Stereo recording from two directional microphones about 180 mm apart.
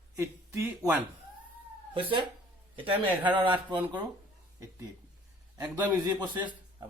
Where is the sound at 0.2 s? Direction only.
15° right (ahead or behind).